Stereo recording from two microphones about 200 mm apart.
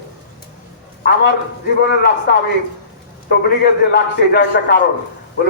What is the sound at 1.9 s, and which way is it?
Speech, 50° left (ahead or behind).